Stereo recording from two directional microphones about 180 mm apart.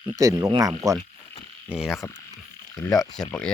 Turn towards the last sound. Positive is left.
turn(degrees=5)  # may be behind; listen again after turning